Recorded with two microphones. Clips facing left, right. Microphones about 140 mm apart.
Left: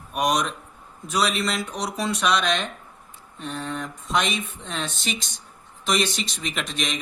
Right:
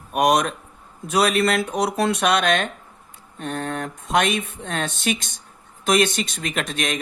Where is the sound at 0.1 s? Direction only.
55° right (ahead or behind).